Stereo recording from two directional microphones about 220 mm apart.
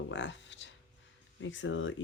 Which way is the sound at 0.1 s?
55° left (ahead or behind).